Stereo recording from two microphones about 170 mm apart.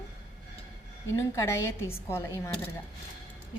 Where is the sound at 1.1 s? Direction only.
15° left (ahead or behind).